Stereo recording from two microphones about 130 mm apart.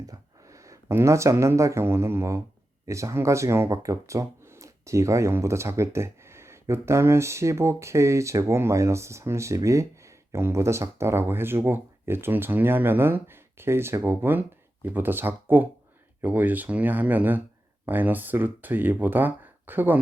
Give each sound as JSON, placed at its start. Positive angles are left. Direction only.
{"t": 0.1, "sound": "speech", "side_deg": -25}